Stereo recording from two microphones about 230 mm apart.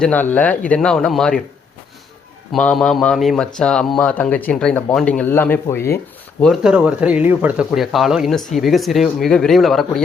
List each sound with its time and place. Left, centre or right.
0.0 s speech: centre
2.5 s speech: centre
6.4 s speech: centre